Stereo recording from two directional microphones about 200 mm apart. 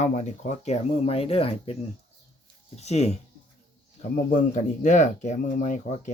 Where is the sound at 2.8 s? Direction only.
35° left (ahead or behind).